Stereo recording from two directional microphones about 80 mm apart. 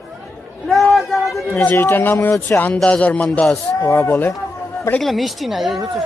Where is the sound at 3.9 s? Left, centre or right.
Left.